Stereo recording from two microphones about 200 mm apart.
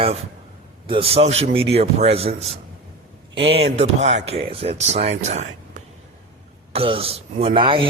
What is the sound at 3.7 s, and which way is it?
Speech, 35° right (ahead or behind).